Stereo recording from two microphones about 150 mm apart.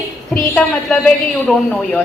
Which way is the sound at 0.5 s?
5° left (ahead or behind).